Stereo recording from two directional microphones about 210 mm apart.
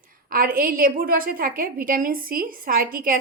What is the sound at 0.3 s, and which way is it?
A woman's voice, 45° right (ahead or behind).